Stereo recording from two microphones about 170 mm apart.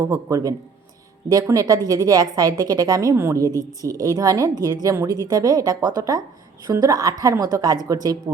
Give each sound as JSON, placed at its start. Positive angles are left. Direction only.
{"t": 0.0, "sound": "a woman's voice", "side_deg": -20}